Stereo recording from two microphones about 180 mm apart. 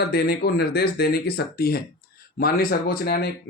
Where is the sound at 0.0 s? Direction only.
60° left (ahead or behind).